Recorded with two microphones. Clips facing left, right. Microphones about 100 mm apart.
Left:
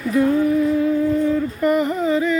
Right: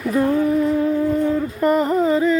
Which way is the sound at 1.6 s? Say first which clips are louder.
Right 3 dB; 40° right (ahead or behind).